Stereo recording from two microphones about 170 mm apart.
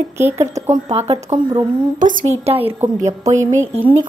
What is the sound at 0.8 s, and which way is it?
Speech, 35° right (ahead or behind).